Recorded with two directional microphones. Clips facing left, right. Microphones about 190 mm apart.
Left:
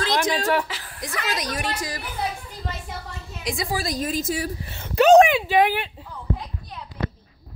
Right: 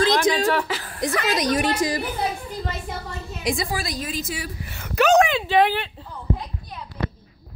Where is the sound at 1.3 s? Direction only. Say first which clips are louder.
Right 6 dB; 20° right (ahead or behind).